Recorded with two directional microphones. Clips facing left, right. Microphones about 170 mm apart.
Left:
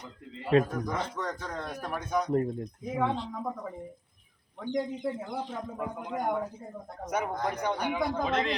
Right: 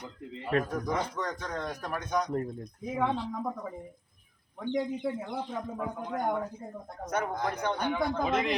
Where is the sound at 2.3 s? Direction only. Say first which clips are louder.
Left 5 dB; 25° left (ahead or behind).